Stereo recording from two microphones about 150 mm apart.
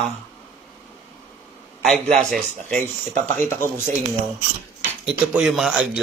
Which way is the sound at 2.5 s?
55° right (ahead or behind).